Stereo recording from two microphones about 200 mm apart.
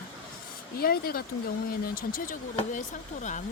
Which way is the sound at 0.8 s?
50° left (ahead or behind).